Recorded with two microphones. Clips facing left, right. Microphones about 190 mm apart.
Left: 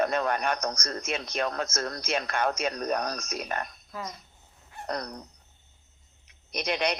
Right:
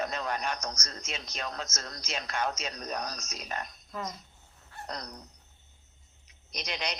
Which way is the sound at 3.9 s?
5° left (ahead or behind).